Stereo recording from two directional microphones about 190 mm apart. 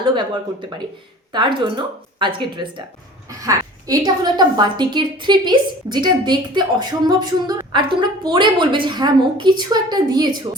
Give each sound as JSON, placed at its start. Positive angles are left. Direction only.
{"t": 0.0, "sound": "a woman's voice", "side_deg": -25}
{"t": 1.3, "sound": "a woman's voice", "side_deg": -25}